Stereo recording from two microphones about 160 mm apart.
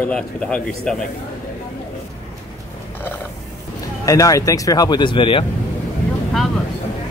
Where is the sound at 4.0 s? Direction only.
20° left (ahead or behind).